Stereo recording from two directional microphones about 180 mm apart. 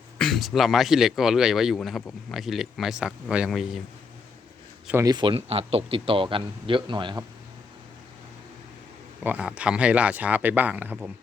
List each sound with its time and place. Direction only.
0.2 s speech: centre (ahead or behind)
4.9 s speech: 20° right (ahead or behind)
9.2 s speech: 5° right (ahead or behind)